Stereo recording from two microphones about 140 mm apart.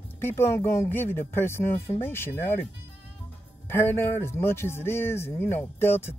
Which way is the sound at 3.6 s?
15° left (ahead or behind).